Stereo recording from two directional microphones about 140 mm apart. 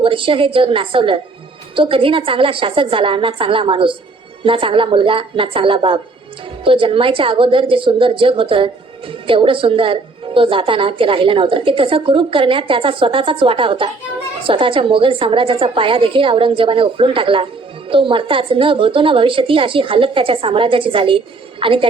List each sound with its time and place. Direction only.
0.0 s a woman's voice: 40° right (ahead or behind)